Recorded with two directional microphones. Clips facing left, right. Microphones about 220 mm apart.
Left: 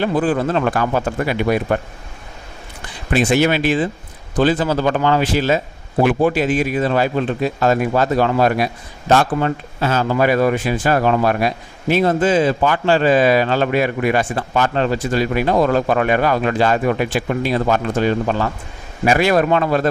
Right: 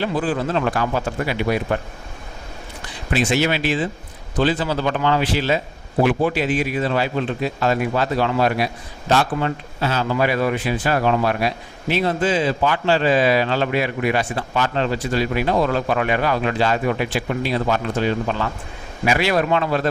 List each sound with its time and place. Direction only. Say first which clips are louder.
0.0 s a man's voice: left 4 dB; 50° left (ahead or behind)
3.1 s a man's voice: left 4 dB; 50° left (ahead or behind)